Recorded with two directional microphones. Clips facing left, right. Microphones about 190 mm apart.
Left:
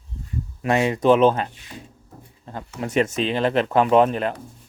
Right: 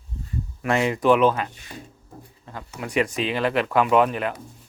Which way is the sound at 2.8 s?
30° left (ahead or behind).